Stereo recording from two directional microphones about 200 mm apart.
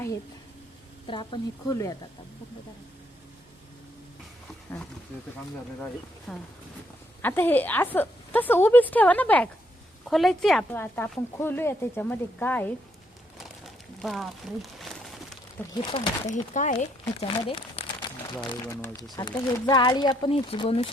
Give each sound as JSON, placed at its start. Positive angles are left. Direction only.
{"t": 1.0, "sound": "speech", "side_deg": 25}
{"t": 6.3, "sound": "speech", "side_deg": 5}
{"t": 15.8, "sound": "speech", "side_deg": 25}
{"t": 16.3, "sound": "speech", "side_deg": 40}
{"t": 18.3, "sound": "speech", "side_deg": 15}